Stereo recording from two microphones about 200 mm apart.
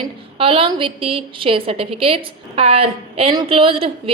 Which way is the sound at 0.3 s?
25° right (ahead or behind).